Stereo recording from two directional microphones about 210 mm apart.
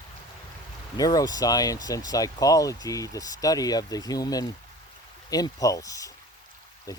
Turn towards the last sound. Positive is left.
turn(degrees=15)  # may be behind; listen again after turning